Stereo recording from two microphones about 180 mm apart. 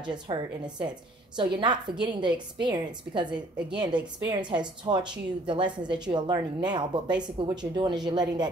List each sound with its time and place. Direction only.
0.0 s a woman's voice: 25° right (ahead or behind)